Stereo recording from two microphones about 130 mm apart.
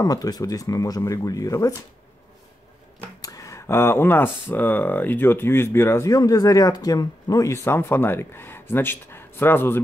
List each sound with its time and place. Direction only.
0.0 s speech: 30° left (ahead or behind)
3.2 s speech: 25° left (ahead or behind)